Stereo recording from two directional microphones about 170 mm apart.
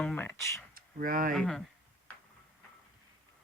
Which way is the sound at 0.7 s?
55° right (ahead or behind).